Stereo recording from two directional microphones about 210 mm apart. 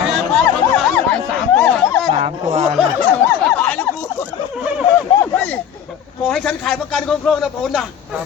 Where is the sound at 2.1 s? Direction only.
30° right (ahead or behind).